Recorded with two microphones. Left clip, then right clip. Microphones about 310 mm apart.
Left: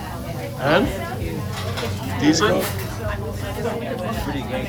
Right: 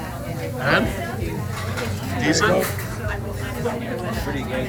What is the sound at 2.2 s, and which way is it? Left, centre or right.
Speech, centre.